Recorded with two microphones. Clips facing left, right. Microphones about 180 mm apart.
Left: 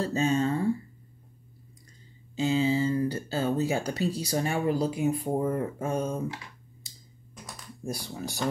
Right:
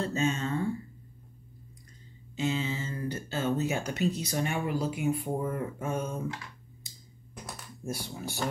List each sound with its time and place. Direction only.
0.0 s speech: 35° left (ahead or behind)
2.3 s speech: 30° left (ahead or behind)